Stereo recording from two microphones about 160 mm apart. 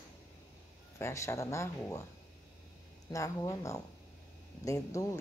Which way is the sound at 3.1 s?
20° left (ahead or behind).